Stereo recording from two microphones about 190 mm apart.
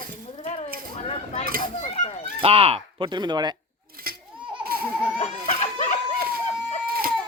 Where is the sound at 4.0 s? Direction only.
50° right (ahead or behind).